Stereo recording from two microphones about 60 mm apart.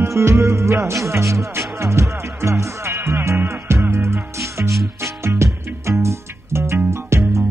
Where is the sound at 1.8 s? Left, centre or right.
Right.